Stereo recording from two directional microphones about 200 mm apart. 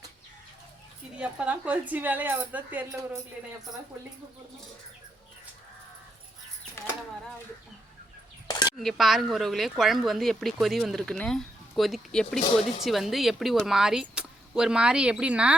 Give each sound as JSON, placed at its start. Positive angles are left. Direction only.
{"t": 1.2, "sound": "speech", "side_deg": -5}
{"t": 8.4, "sound": "a sound", "side_deg": 20}
{"t": 8.8, "sound": "speech", "side_deg": 0}